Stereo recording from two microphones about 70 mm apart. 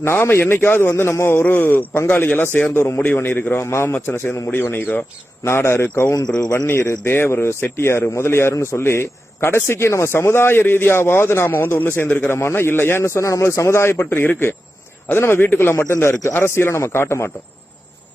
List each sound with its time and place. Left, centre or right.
0.0 s a man's voice: left
6.1 s speech: left
6.7 s speech: left